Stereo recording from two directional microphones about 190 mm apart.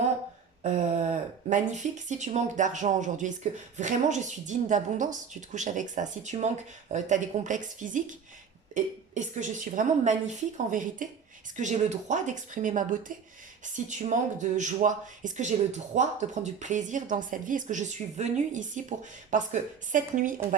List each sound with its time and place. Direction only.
0.6 s speech: 40° right (ahead or behind)